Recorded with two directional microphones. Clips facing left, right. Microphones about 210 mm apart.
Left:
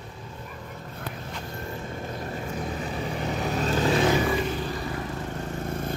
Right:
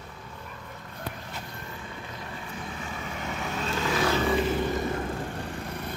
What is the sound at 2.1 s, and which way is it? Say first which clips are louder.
Vehicle: left 7 dB; 45° left (ahead or behind).